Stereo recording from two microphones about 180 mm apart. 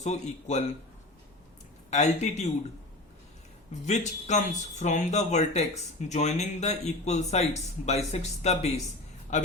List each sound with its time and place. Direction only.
0.0 s speech: 40° left (ahead or behind)
1.9 s speech: 40° left (ahead or behind)
3.8 s speech: 40° left (ahead or behind)